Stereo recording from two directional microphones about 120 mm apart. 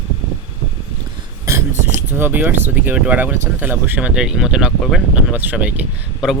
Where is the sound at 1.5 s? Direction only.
25° right (ahead or behind).